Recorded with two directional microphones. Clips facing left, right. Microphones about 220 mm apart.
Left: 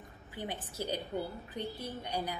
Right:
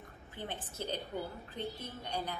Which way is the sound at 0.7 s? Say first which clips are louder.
Left 3 dB; 10° left (ahead or behind).